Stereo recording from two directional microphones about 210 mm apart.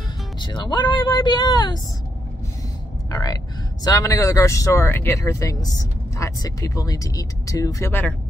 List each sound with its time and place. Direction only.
0.4 s speech: 20° left (ahead or behind)
3.1 s speech: 15° left (ahead or behind)